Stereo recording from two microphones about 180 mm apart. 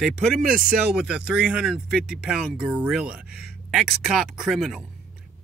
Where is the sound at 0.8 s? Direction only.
5° right (ahead or behind).